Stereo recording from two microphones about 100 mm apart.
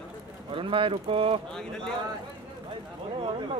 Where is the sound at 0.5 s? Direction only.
60° right (ahead or behind).